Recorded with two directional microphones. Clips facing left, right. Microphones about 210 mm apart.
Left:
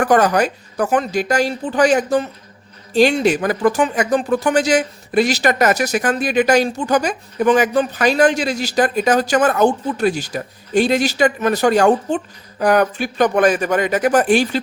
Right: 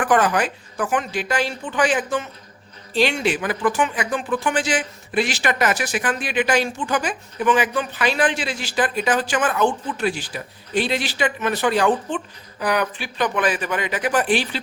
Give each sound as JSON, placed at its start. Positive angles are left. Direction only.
{"t": 0.0, "sound": "speech", "side_deg": 40}